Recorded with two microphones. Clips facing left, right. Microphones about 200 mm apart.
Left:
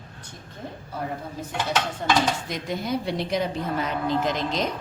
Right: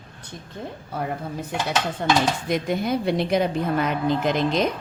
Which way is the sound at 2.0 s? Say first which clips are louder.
Right 3 dB; 65° right (ahead or behind).